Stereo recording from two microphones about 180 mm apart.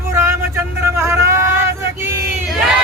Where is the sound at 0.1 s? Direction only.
15° right (ahead or behind).